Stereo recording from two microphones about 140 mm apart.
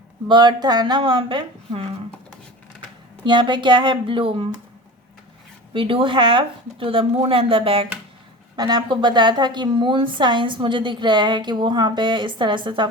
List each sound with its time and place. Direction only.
0.3 s a woman's voice: 30° right (ahead or behind)
3.2 s a woman's voice: 35° right (ahead or behind)
5.7 s a woman's voice: 40° right (ahead or behind)